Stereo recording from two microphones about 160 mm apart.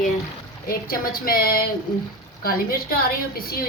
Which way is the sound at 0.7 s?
65° left (ahead or behind).